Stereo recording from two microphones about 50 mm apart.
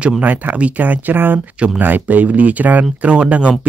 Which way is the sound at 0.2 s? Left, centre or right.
Right.